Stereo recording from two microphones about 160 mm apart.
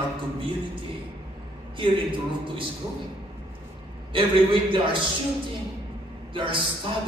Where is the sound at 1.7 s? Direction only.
30° right (ahead or behind).